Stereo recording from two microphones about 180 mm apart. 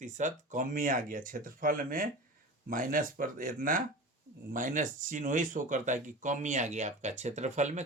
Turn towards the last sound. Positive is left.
turn(degrees=-40)  # may be behind; listen again after turning